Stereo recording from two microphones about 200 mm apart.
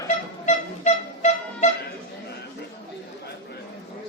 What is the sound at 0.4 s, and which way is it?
Music, 35° left (ahead or behind).